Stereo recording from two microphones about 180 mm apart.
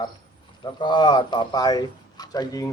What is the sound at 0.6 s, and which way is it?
Speech, 25° left (ahead or behind).